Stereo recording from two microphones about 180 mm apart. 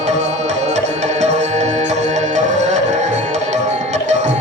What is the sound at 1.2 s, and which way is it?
Music, 40° right (ahead or behind).